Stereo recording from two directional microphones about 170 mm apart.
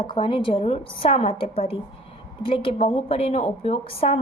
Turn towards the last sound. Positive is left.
turn(degrees=35)  # may be behind; listen again after turning